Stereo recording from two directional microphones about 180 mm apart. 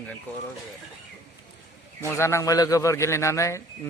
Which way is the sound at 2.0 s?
15° left (ahead or behind).